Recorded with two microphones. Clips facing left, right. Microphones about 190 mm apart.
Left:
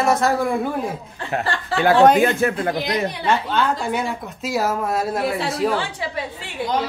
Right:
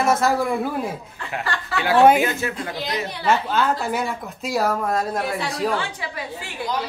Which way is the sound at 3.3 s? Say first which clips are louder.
Right 2 dB; 5° right (ahead or behind).